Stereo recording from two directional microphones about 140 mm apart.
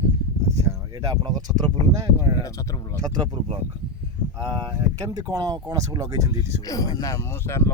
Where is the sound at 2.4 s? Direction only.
20° left (ahead or behind).